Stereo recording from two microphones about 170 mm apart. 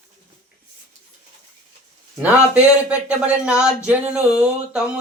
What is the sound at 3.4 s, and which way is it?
Speech, 5° right (ahead or behind).